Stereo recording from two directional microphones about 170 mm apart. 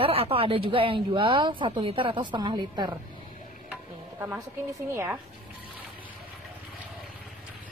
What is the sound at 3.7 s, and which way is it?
Stir, 10° right (ahead or behind).